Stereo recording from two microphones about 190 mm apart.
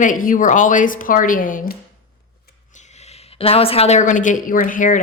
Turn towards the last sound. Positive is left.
turn(degrees=45)  # may be behind; listen again after turning